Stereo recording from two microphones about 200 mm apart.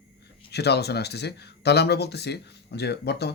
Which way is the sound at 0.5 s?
55° left (ahead or behind).